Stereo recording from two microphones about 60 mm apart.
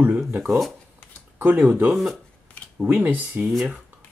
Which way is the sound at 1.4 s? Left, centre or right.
Right.